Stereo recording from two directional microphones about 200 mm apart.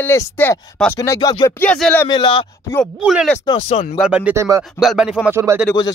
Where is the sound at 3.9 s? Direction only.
5° right (ahead or behind).